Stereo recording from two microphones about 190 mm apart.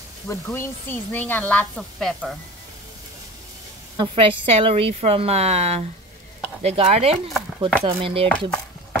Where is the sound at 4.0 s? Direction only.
25° right (ahead or behind).